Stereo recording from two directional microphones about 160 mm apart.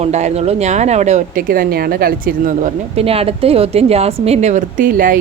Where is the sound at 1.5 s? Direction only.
70° right (ahead or behind); by 3.0 s 55° right (ahead or behind).